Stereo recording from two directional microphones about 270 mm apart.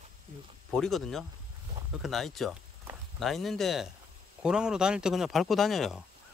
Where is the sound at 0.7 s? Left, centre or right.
Centre.